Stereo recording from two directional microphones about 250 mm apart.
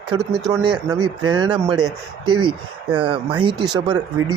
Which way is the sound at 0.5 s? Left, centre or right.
Centre.